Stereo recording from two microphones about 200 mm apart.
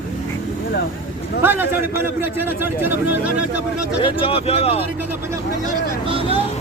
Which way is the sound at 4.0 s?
25° left (ahead or behind).